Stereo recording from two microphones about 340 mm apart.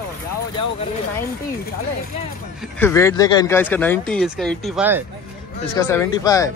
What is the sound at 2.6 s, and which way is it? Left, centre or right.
Speech, centre.